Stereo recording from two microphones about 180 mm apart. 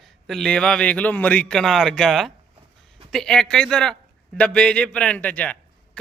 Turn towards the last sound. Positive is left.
turn(degrees=10)  # may be behind; listen again after turning